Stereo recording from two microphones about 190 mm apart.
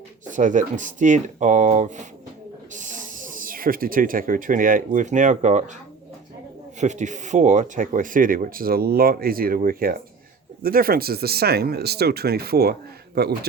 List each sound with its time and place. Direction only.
0.3 s speech: 40° right (ahead or behind)
6.7 s speech: 40° right (ahead or behind); by 13.3 s 55° right (ahead or behind)